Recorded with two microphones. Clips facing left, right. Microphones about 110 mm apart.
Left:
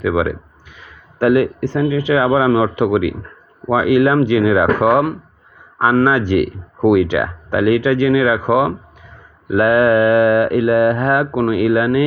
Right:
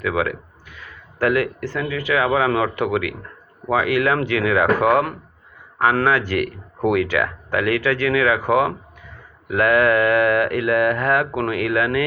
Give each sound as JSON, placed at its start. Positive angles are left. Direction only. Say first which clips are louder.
{"t": 0.0, "sound": "speech", "louder": "left 5 dB", "side_deg": 20}